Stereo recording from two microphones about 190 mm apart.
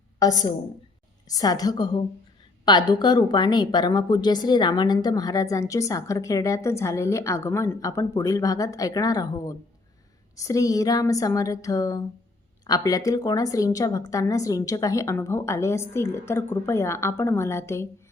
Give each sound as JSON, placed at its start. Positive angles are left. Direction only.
{"t": 0.2, "sound": "a woman's voice", "side_deg": 20}